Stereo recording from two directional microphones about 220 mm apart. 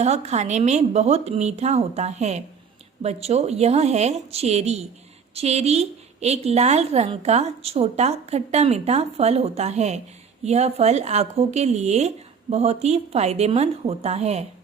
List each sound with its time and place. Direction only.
0.0 s a woman's voice: 30° right (ahead or behind)